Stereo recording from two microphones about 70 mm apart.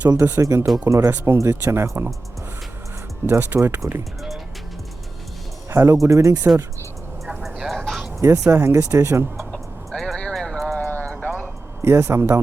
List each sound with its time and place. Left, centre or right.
0.2 s speech: right
0.4 s speech: right
3.2 s speech: right
5.7 s speech: right
7.4 s vehicle: centre
7.8 s a sound: centre
8.2 s speech: right
9.5 s a sound: centre
10.8 s clip-clop: left
11.1 s vehicle: left
11.4 s a sound: right